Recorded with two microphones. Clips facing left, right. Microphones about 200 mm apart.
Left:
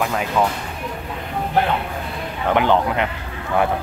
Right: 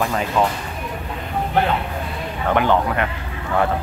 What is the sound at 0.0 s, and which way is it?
Speech, 5° left (ahead or behind).